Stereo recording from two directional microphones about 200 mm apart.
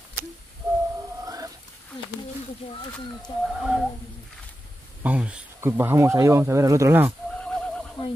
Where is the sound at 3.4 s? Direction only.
5° right (ahead or behind).